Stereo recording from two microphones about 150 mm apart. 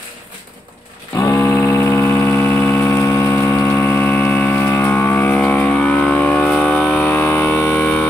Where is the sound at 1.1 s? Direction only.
20° left (ahead or behind).